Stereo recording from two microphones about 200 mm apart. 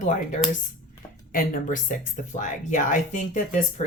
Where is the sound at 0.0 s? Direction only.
40° left (ahead or behind).